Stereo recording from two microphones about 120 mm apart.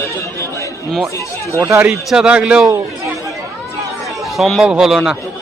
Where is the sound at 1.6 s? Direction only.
20° right (ahead or behind).